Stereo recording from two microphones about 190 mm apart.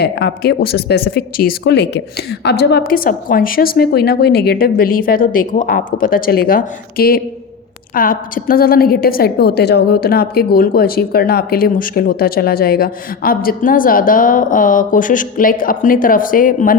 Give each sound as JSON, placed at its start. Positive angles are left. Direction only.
{"t": 0.0, "sound": "a woman's voice", "side_deg": 60}